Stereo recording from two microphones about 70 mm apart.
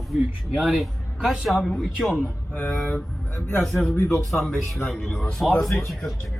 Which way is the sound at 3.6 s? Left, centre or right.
Centre.